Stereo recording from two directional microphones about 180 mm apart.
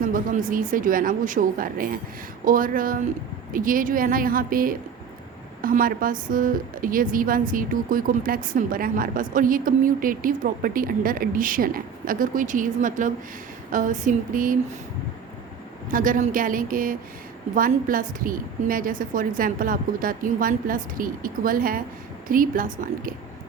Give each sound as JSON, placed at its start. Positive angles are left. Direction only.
{"t": 0.0, "sound": "a woman's voice", "side_deg": -50}
{"t": 15.9, "sound": "a woman's voice", "side_deg": -50}